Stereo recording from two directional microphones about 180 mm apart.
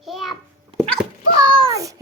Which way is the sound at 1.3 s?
25° right (ahead or behind).